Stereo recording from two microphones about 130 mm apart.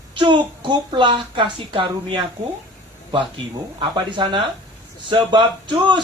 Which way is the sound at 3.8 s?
35° right (ahead or behind).